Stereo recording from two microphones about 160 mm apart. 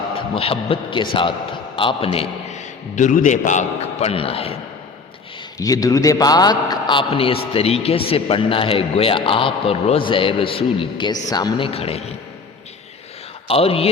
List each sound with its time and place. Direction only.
0.3 s a man's voice: 35° left (ahead or behind)
5.5 s a man's voice: 20° left (ahead or behind); by 12.0 s 40° left (ahead or behind)
13.5 s a man's voice: 35° left (ahead or behind)